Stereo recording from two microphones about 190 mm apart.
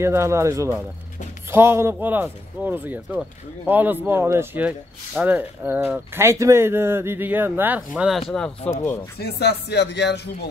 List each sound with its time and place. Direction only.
0.0 s a man's voice: 15° right (ahead or behind)
8.6 s speech: 15° left (ahead or behind)
9.2 s speech: 60° left (ahead or behind)